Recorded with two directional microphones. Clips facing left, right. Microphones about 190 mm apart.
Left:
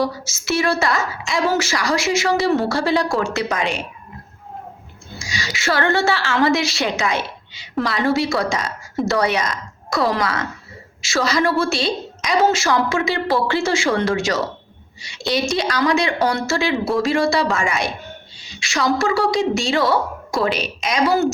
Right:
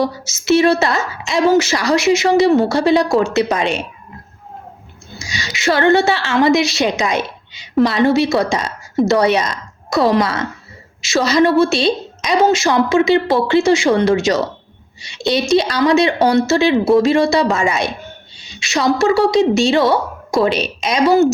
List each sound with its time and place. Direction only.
0.0 s a woman's voice: 20° right (ahead or behind)
5.2 s a woman's voice: 20° right (ahead or behind)